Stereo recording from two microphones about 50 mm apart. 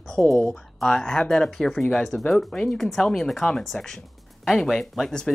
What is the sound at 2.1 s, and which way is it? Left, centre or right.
Speech, left.